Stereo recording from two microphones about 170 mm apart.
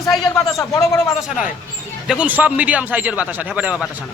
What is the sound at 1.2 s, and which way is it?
A man's voice, 5° right (ahead or behind).